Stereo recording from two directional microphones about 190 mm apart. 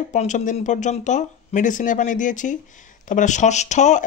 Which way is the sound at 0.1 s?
40° left (ahead or behind).